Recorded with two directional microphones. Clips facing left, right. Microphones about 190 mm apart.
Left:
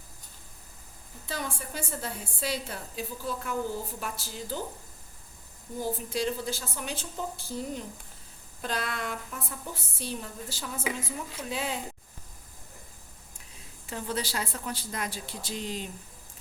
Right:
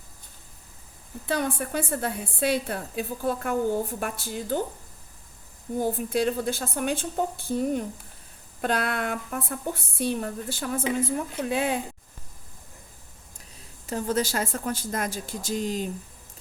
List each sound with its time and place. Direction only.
1.3 s a woman's voice: 60° right (ahead or behind)
5.8 s a woman's voice: 55° right (ahead or behind)
13.8 s a woman's voice: 45° right (ahead or behind)